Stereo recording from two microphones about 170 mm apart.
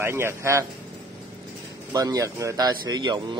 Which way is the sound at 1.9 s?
20° right (ahead or behind).